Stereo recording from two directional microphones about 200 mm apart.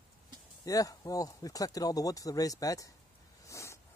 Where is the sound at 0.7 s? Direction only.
15° left (ahead or behind).